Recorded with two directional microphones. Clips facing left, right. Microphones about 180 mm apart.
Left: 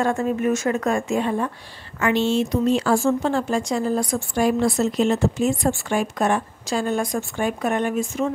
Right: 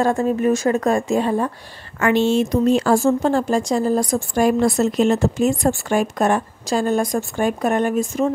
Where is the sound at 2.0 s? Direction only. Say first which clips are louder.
Right 3 dB; 50° right (ahead or behind).